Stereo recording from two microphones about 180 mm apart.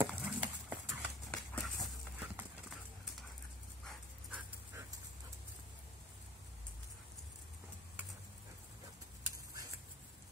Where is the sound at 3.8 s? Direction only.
5° right (ahead or behind).